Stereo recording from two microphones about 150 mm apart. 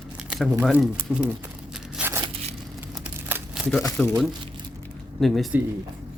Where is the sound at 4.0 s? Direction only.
Centre (ahead or behind).